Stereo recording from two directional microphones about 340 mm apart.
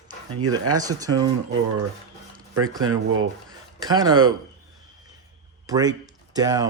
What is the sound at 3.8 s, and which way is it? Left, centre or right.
Speech, centre.